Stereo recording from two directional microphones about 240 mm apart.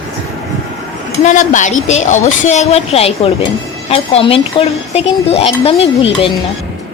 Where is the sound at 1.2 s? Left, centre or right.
Left.